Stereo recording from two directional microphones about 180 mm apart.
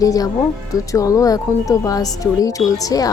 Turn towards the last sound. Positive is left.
turn(degrees=20)  # may be behind; listen again after turning